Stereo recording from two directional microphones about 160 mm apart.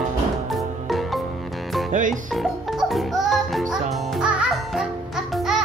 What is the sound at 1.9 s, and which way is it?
Music, 55° right (ahead or behind).